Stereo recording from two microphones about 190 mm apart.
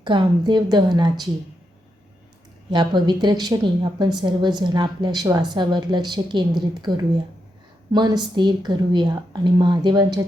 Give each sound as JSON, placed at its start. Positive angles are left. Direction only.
{"t": 0.0, "sound": "a woman's voice", "side_deg": -25}
{"t": 2.6, "sound": "a woman's voice", "side_deg": -25}